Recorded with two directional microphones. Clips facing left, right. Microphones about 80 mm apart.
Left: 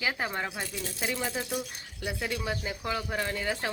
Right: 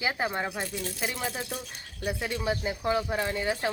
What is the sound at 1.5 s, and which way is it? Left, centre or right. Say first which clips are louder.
Speech: left 3 dB; centre.